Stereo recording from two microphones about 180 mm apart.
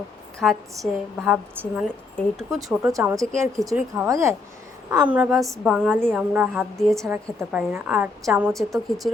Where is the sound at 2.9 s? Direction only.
15° right (ahead or behind); by 7.1 s centre (ahead or behind).